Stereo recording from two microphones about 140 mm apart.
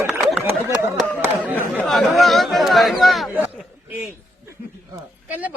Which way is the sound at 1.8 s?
5° left (ahead or behind).